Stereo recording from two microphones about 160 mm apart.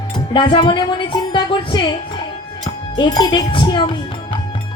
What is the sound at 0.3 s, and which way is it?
A woman's voice, 30° left (ahead or behind).